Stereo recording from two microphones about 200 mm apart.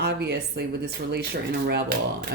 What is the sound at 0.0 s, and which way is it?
Speech, 55° right (ahead or behind).